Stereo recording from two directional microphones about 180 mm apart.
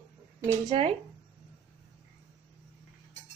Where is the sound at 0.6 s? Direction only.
35° right (ahead or behind).